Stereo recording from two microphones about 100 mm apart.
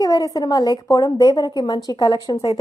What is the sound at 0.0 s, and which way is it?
A woman's voice, 35° left (ahead or behind).